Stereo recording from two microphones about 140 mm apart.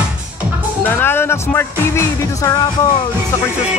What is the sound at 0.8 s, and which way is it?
Music, 15° left (ahead or behind).